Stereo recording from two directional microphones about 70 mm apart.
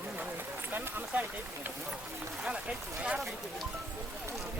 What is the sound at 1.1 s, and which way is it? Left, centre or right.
Speech, right.